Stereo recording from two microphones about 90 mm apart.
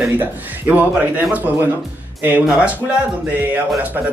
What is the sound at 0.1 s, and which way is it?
Speech, 20° right (ahead or behind).